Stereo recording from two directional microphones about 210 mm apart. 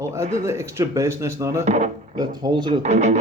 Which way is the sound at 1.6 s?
30° right (ahead or behind).